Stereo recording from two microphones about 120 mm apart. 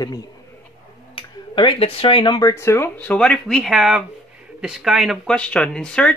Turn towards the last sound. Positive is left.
turn(degrees=10)  # may be behind; listen again after turning